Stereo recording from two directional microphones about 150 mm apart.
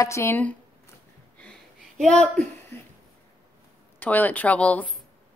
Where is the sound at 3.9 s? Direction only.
10° left (ahead or behind).